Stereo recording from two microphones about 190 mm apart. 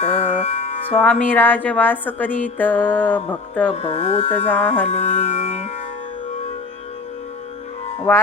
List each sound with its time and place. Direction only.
0.0 s music: 35° left (ahead or behind)
1.0 s a woman's voice: 10° left (ahead or behind)
3.7 s music: 35° left (ahead or behind)
4.4 s a woman's voice: 10° left (ahead or behind)
4.9 s music: 35° left (ahead or behind)